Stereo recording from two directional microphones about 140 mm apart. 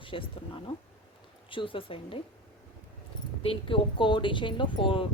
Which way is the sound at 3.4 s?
40° left (ahead or behind).